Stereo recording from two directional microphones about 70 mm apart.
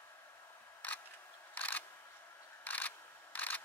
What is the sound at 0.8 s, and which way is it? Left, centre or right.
Single-lens reflex camera, left.